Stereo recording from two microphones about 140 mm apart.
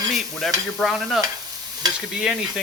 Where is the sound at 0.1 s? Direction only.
Centre (ahead or behind).